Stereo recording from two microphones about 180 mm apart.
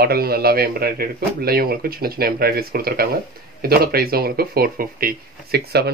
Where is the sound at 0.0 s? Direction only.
60° right (ahead or behind).